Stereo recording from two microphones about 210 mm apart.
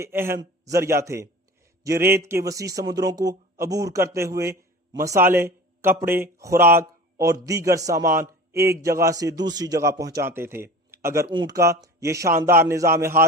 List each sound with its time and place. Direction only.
0.0 s a man's voice: 10° right (ahead or behind)